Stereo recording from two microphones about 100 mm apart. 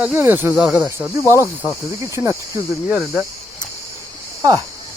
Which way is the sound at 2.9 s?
10° right (ahead or behind).